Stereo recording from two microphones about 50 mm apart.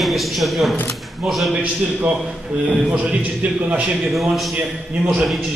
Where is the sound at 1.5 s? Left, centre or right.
Right.